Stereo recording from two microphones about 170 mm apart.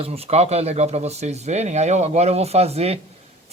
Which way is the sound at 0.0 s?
35° right (ahead or behind).